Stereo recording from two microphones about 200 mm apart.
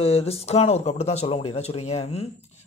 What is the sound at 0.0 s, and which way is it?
A man's voice, 30° left (ahead or behind).